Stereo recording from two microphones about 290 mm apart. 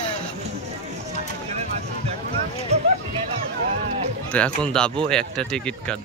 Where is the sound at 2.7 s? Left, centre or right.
Right.